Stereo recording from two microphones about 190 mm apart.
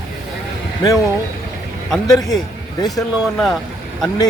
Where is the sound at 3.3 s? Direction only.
Centre (ahead or behind).